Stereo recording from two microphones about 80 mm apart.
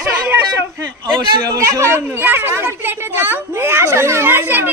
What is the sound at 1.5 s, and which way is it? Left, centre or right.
Speech, right.